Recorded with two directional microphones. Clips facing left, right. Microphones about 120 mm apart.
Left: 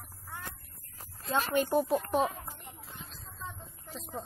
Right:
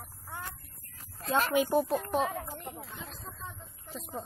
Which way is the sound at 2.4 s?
60° right (ahead or behind).